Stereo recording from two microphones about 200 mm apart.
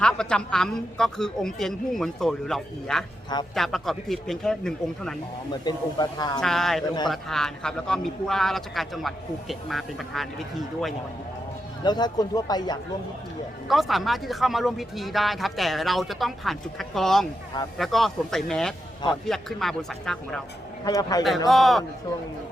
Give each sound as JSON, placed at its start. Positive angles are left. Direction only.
{"t": 0.0, "sound": "speech", "side_deg": 5}
{"t": 5.6, "sound": "speech", "side_deg": 20}
{"t": 6.4, "sound": "speech", "side_deg": 0}
{"t": 11.8, "sound": "speech", "side_deg": 20}
{"t": 13.7, "sound": "speech", "side_deg": 0}
{"t": 20.8, "sound": "speech", "side_deg": 20}
{"t": 21.2, "sound": "speech", "side_deg": 0}